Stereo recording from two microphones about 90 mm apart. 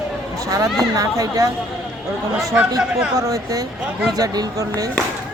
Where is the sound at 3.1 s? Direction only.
40° right (ahead or behind).